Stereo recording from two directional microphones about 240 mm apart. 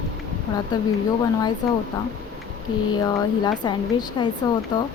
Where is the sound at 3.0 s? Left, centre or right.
Centre.